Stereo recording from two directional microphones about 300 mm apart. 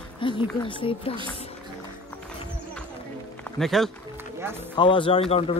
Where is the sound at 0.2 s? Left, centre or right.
Centre.